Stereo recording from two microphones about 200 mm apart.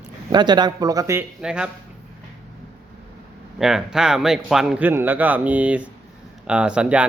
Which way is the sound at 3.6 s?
5° right (ahead or behind).